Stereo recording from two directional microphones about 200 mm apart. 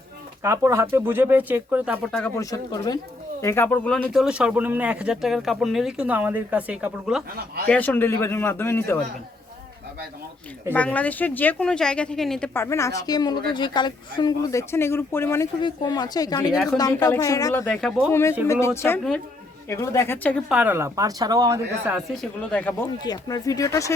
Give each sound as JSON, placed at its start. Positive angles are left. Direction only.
{"t": 0.4, "sound": "speech", "side_deg": -15}
{"t": 2.1, "sound": "speech", "side_deg": 10}
{"t": 7.3, "sound": "speech", "side_deg": -50}
{"t": 7.7, "sound": "speech", "side_deg": 10}
{"t": 10.7, "sound": "speech", "side_deg": 5}
{"t": 12.6, "sound": "speech", "side_deg": 15}
{"t": 17.7, "sound": "speech", "side_deg": 0}
{"t": 18.1, "sound": "speech", "side_deg": 15}
{"t": 20.5, "sound": "speech", "side_deg": -10}
{"t": 21.9, "sound": "speech", "side_deg": 0}
{"t": 23.0, "sound": "speech", "side_deg": 20}